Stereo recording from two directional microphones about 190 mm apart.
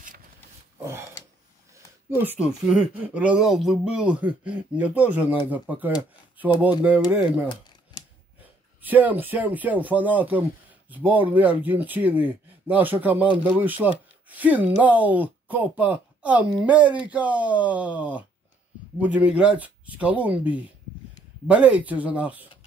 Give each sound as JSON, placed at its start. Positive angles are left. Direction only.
{"t": 2.0, "sound": "speech", "side_deg": -10}
{"t": 7.9, "sound": "scissors", "side_deg": 20}
{"t": 8.8, "sound": "speech", "side_deg": -10}